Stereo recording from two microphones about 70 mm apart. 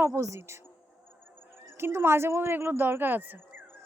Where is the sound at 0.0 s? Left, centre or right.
Right.